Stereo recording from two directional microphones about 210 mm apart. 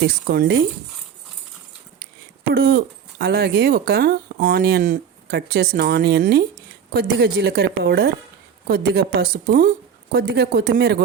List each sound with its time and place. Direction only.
0.1 s speech: 50° right (ahead or behind)
2.5 s speech: 45° right (ahead or behind)